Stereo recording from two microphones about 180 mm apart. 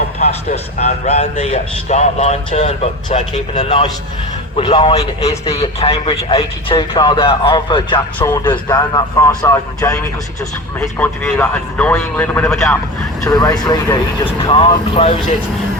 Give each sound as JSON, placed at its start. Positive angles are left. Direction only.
{"t": 0.2, "sound": "a man's voice", "side_deg": 35}
{"t": 13.2, "sound": "a man's voice", "side_deg": 20}